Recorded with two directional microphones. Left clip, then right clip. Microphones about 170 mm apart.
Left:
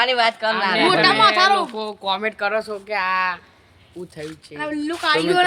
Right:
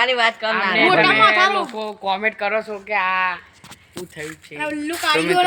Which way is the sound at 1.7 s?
40° left (ahead or behind).